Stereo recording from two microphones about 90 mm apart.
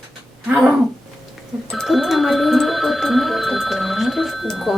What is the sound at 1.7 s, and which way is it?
Speech, centre (ahead or behind).